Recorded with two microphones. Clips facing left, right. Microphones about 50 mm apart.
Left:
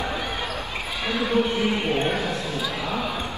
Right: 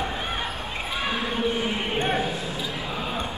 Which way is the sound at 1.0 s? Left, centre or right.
Right.